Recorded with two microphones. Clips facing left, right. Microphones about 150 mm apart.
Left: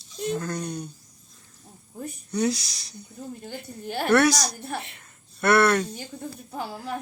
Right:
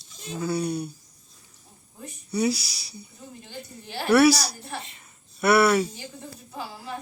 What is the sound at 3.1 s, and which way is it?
Speech, 60° left (ahead or behind).